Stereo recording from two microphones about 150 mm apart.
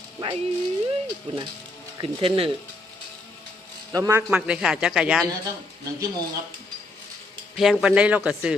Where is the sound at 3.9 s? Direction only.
20° right (ahead or behind).